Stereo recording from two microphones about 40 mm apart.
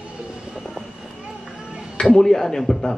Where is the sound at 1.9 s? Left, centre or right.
Centre.